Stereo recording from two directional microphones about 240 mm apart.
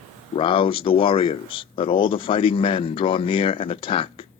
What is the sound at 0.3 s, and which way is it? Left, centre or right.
Speech, left.